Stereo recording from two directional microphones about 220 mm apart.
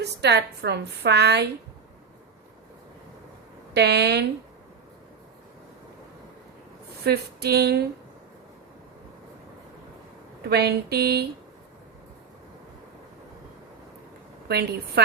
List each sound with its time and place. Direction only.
0.0 s a woman's voice: 50° right (ahead or behind)
3.8 s a woman's voice: 50° right (ahead or behind)
7.0 s a woman's voice: 45° right (ahead or behind)
10.5 s a woman's voice: 45° right (ahead or behind)
14.4 s a woman's voice: 45° right (ahead or behind)